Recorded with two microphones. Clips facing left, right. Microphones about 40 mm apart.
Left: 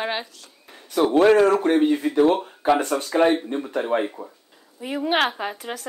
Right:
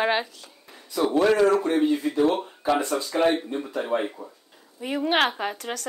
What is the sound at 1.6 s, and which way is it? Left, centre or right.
Speech, left.